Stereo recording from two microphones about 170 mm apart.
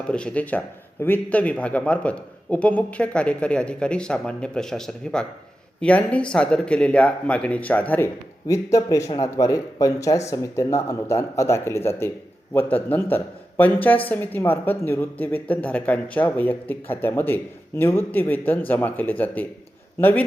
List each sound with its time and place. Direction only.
0.1 s a woman's voice: 5° left (ahead or behind)